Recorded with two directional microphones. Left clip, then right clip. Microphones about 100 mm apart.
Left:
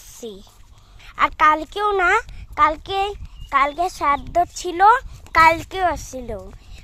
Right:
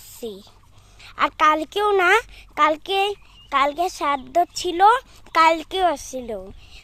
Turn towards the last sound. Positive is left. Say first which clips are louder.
# right 1 dB
turn(degrees=-15)  # may be behind; listen again after turning